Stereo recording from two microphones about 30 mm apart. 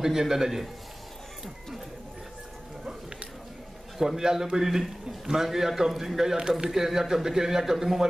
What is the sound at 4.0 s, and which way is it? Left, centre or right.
A man's voice, centre.